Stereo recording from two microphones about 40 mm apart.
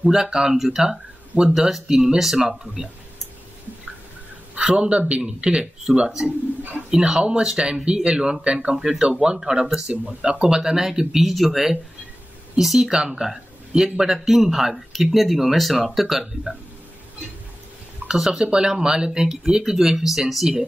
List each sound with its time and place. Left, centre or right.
0.1 s speech: centre
4.6 s speech: right
6.9 s speech: centre
10.4 s speech: centre
18.0 s speech: centre